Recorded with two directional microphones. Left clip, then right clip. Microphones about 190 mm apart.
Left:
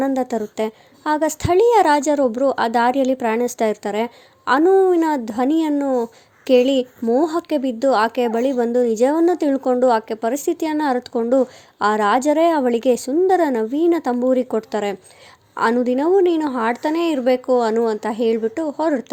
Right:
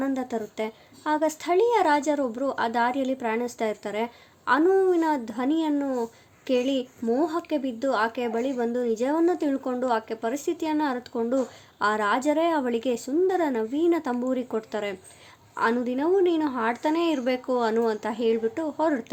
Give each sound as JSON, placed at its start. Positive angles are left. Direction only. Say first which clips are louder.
{"t": 0.0, "sound": "a woman's voice", "louder": "left 8 dB", "side_deg": 35}